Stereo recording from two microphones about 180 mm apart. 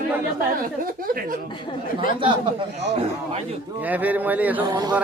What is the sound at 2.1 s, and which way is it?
Speech, 30° right (ahead or behind).